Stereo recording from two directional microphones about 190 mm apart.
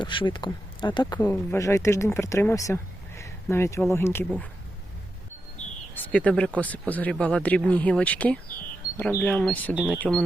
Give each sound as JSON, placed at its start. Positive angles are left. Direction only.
{"t": 0.0, "sound": "speech", "side_deg": 25}
{"t": 5.9, "sound": "speech", "side_deg": 10}